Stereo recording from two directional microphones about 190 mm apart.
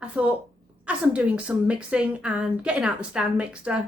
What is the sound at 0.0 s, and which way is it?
A woman's voice, 5° right (ahead or behind).